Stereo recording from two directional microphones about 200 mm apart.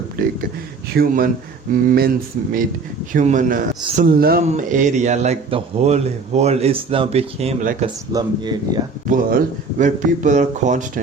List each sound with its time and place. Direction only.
0.9 s a man's voice: 45° right (ahead or behind)
8.1 s speech: 20° right (ahead or behind)
9.0 s a man's voice: 40° right (ahead or behind)